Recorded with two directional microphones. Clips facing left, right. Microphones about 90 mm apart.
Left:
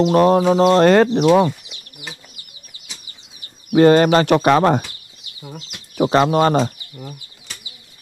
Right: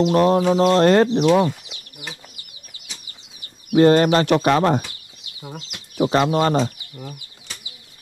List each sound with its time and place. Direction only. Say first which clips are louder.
0.1 s speech: left 3 dB; 70° left (ahead or behind)
1.0 s speech: left 2 dB; 45° left (ahead or behind)
3.7 s speech: left 2 dB; 90° left
4.5 s speech: left 3 dB; 65° left (ahead or behind)
5.9 s speech: left 3 dB; 65° left (ahead or behind)
7.0 s bird flight: left 1 dB; 5° left (ahead or behind)